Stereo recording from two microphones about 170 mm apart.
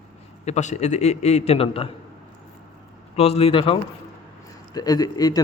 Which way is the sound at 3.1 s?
35° left (ahead or behind).